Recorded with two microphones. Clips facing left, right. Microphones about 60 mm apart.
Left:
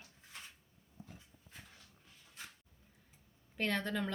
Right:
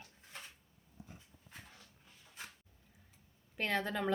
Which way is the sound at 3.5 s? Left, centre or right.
Centre.